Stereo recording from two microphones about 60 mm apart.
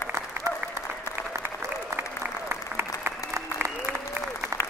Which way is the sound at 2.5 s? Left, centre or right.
Right.